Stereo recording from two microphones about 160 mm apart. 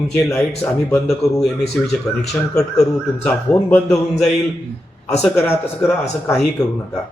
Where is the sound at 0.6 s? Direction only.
10° left (ahead or behind).